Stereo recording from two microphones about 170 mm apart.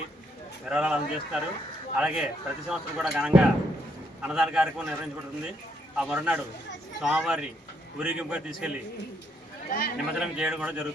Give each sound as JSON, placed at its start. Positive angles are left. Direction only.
{"t": 0.6, "sound": "speech", "side_deg": -5}
{"t": 6.0, "sound": "a man's voice", "side_deg": -5}
{"t": 9.6, "sound": "a man's voice", "side_deg": 60}
{"t": 10.2, "sound": "speech", "side_deg": -5}